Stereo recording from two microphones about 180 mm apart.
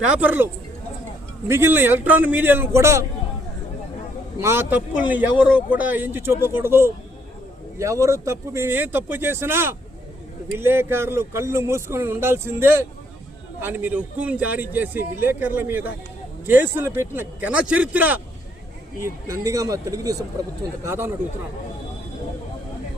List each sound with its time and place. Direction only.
0.2 s a man's voice: 10° right (ahead or behind)
4.4 s a man's voice: 15° right (ahead or behind)